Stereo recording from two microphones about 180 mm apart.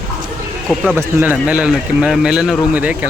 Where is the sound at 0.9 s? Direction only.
10° right (ahead or behind).